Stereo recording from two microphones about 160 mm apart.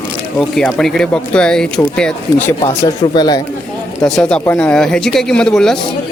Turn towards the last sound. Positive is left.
turn(degrees=5)  # may be behind; listen again after turning